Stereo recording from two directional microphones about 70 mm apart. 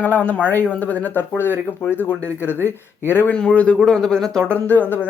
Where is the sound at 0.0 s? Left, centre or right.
Left.